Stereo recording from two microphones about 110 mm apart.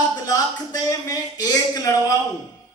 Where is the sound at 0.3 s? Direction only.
35° left (ahead or behind).